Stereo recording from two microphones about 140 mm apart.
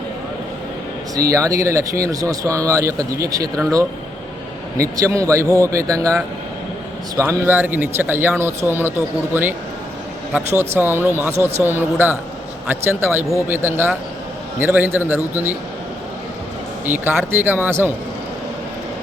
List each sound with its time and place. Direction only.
1.3 s speech: 20° right (ahead or behind)
3.5 s speech: 5° left (ahead or behind)
4.8 s speech: 25° right (ahead or behind)
7.2 s speech: 15° right (ahead or behind)
16.8 s speech: 15° right (ahead or behind)